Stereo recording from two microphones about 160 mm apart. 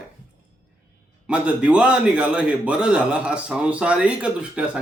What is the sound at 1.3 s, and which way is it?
A man's voice, 5° right (ahead or behind).